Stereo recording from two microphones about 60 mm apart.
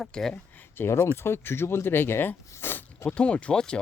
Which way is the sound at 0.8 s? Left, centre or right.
Left.